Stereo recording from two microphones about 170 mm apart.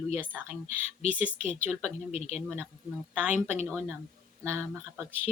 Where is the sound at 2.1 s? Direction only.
40° left (ahead or behind).